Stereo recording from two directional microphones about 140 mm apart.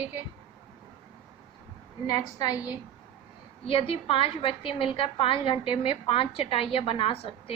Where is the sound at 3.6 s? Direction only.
40° left (ahead or behind).